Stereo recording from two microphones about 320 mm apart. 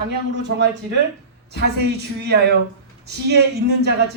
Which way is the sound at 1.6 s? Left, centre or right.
Right.